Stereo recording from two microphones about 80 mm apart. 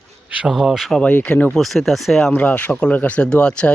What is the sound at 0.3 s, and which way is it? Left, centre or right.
Speech, centre.